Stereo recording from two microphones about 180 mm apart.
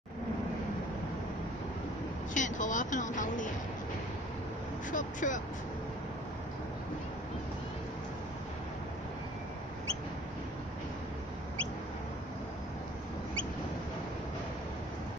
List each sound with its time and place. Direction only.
2.3 s speech: 45° left (ahead or behind)
4.9 s speech: 45° left (ahead or behind)